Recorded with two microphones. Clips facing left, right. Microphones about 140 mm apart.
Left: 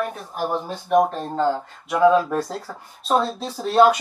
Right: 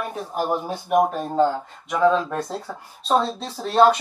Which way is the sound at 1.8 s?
5° left (ahead or behind).